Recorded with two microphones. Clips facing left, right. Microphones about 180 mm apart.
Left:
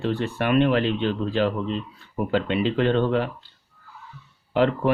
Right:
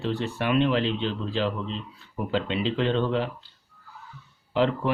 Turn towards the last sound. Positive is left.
turn(degrees=55)  # may be behind; listen again after turning